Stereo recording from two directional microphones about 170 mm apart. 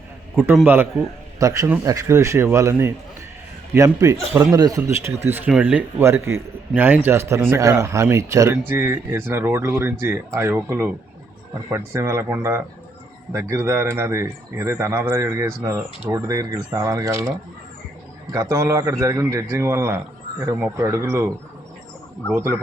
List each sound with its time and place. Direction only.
0.3 s speech: 10° right (ahead or behind)
20.8 s speech: 15° right (ahead or behind)
22.3 s speech: 10° right (ahead or behind)